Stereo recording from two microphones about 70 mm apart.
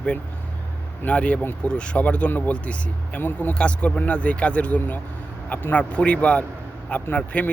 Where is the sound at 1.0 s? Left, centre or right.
Centre.